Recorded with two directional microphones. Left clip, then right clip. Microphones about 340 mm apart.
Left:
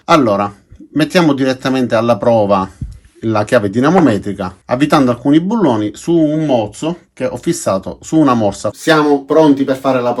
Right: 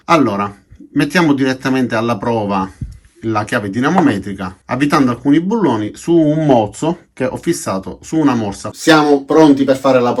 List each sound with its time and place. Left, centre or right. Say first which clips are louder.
0.0 s speech: left 2 dB; centre
8.8 s speech: right 1 dB; centre